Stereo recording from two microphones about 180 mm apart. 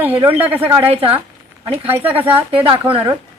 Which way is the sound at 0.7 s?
30° right (ahead or behind).